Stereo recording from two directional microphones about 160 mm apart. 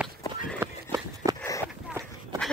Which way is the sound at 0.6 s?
20° right (ahead or behind).